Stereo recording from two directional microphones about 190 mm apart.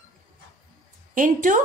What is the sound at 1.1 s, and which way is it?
Speech, 45° right (ahead or behind).